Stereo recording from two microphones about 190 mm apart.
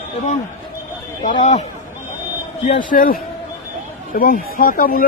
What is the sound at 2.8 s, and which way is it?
Speech, 45° left (ahead or behind).